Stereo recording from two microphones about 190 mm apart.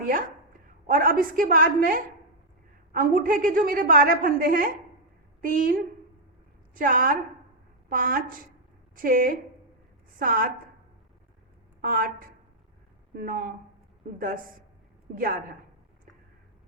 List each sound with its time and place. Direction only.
0.0 s a woman's voice: 45° right (ahead or behind)
11.8 s a woman's voice: 50° right (ahead or behind)